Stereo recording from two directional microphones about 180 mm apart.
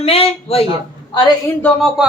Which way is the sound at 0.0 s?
35° left (ahead or behind).